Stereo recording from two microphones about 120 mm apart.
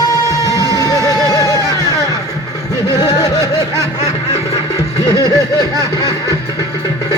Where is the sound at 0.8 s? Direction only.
30° left (ahead or behind).